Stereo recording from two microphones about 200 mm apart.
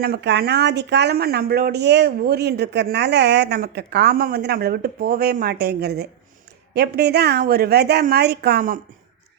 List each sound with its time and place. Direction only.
0.0 s speech: 55° right (ahead or behind)